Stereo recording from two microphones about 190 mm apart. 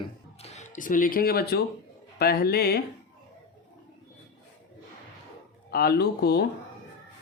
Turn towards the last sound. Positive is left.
turn(degrees=55)  # may be behind; listen again after turning